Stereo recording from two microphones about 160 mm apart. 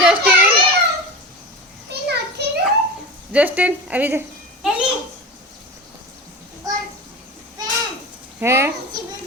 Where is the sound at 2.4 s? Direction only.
90° right.